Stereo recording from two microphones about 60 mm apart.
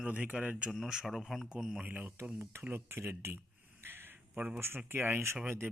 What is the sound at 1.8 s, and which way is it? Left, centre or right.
Speech, right.